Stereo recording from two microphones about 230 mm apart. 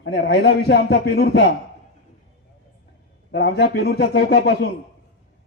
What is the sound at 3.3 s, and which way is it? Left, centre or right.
A man's voice, left.